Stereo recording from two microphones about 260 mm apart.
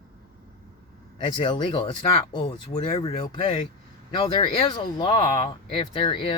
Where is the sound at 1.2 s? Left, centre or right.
Centre.